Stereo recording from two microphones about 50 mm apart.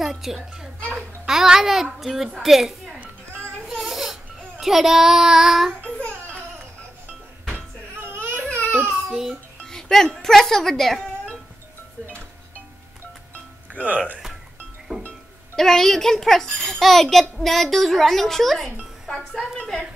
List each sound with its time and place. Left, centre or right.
0.0 s music: centre
0.9 s a child's voice: centre
3.6 s a sound: centre
8.0 s baby cry: right
8.8 s a sound: centre
9.7 s speech: centre
13.7 s speech: right
14.9 s music: right
15.5 s a child's voice: centre